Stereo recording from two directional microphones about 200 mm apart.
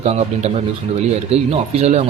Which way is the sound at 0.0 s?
30° right (ahead or behind).